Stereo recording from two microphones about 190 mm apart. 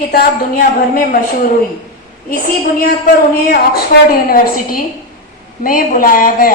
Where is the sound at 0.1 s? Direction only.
50° left (ahead or behind).